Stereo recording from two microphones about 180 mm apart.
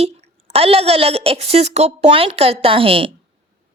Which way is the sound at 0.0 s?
35° right (ahead or behind).